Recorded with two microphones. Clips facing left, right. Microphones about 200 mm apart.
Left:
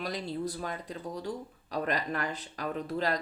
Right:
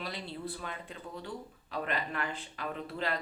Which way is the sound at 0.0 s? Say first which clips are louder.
Left 6 dB; 40° left (ahead or behind).